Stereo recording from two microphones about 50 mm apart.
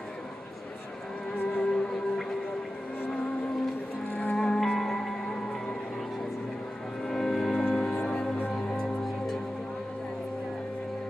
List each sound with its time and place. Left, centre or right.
1.3 s music: left
1.6 s music: centre
4.4 s music: centre
7.1 s music: centre